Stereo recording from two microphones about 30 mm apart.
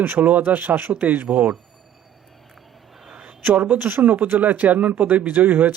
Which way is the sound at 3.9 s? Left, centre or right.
Right.